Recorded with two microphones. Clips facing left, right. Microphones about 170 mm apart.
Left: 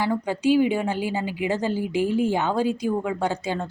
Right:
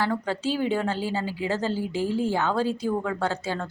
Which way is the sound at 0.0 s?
15° left (ahead or behind).